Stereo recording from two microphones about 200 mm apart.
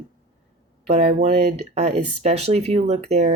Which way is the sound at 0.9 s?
30° right (ahead or behind).